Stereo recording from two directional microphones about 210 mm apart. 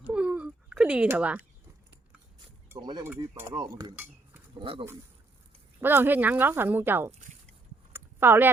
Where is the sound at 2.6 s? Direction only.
15° right (ahead or behind).